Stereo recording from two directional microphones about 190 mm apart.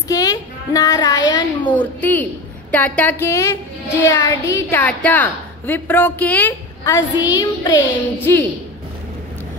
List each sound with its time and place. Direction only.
0.1 s child singing: 20° left (ahead or behind)
1.6 s a woman's voice: 10° left (ahead or behind)